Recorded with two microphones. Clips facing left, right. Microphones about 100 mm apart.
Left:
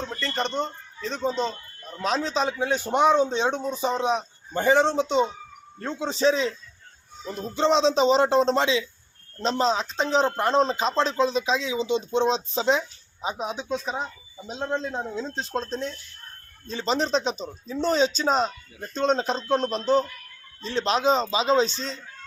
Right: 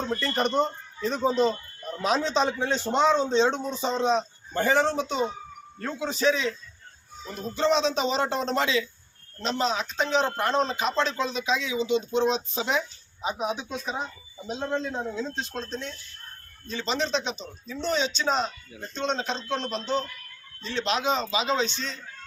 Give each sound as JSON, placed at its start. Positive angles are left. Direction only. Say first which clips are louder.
{"t": 0.0, "sound": "a man's voice", "louder": "right 2 dB", "side_deg": -5}